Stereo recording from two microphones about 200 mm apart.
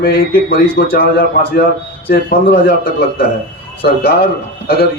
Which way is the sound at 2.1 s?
50° left (ahead or behind).